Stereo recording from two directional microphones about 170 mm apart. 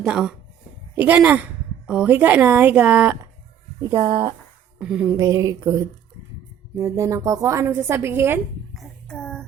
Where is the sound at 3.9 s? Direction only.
25° right (ahead or behind).